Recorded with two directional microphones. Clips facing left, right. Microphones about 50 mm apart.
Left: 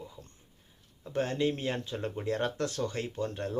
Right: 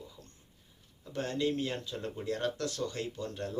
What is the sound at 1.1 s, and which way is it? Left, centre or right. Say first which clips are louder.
Speech: left 2 dB; left.